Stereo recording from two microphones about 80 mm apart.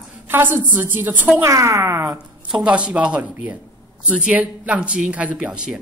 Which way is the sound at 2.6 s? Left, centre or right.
Centre.